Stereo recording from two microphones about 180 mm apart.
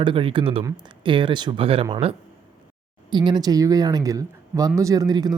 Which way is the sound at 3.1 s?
25° right (ahead or behind).